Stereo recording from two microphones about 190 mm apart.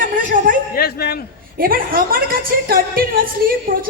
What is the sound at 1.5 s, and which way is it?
A woman's voice, 50° right (ahead or behind).